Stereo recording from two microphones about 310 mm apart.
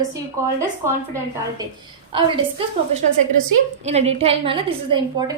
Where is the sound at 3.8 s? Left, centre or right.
Right.